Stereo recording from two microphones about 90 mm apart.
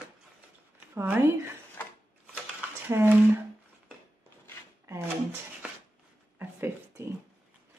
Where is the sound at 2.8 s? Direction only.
25° right (ahead or behind).